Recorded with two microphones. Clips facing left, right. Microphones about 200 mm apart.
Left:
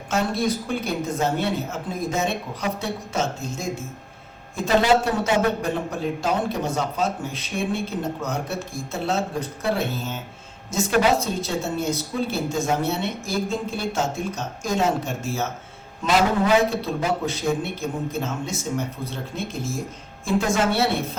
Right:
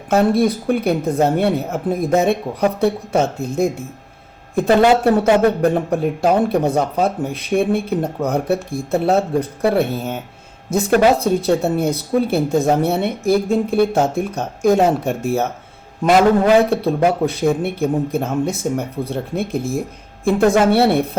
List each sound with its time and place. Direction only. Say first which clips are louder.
0.1 s a man's voice: right 8 dB; 60° right (ahead or behind)